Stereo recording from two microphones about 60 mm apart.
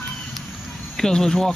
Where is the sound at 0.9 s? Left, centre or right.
Centre.